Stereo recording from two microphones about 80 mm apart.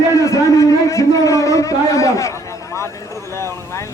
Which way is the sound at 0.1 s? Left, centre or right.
Left.